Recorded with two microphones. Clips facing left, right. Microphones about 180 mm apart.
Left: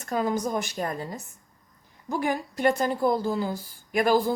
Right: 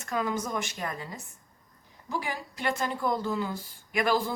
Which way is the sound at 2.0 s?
50° left (ahead or behind).